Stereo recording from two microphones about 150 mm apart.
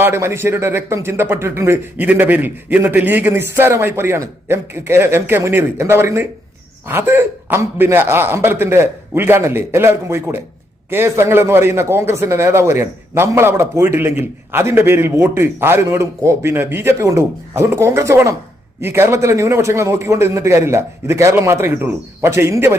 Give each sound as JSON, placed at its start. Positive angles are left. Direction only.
{"t": 0.0, "sound": "a man's voice", "side_deg": -15}